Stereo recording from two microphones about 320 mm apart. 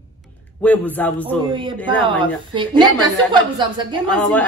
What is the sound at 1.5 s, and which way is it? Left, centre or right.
A woman's voice, centre.